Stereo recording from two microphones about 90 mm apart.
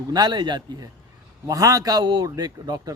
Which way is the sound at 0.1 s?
55° right (ahead or behind).